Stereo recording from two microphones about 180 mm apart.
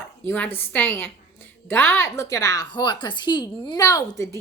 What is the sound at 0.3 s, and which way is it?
A woman's voice, 10° left (ahead or behind).